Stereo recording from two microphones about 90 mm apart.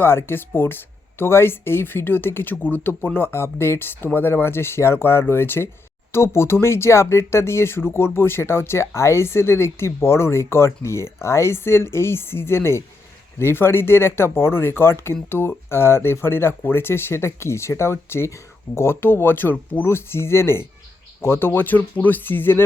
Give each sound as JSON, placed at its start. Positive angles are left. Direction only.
{"t": 0.0, "sound": "speech", "side_deg": 25}